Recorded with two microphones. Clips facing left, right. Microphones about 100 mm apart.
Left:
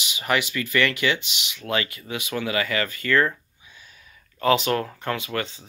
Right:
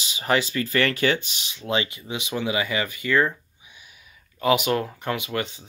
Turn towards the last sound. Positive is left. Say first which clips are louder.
# even
turn(degrees=-20)  # may be behind; listen again after turning